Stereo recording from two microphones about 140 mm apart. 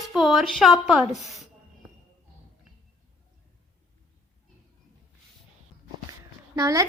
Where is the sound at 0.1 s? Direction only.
Centre (ahead or behind).